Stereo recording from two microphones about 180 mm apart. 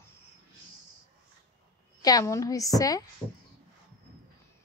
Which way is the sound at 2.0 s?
20° left (ahead or behind).